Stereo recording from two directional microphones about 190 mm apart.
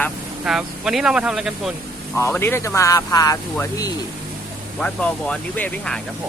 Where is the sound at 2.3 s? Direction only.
10° left (ahead or behind).